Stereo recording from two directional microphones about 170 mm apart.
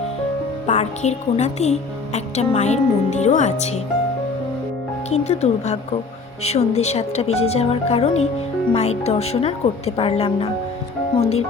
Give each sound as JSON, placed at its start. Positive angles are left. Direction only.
{"t": 0.7, "sound": "a woman's voice", "side_deg": 40}
{"t": 5.1, "sound": "a woman's voice", "side_deg": 40}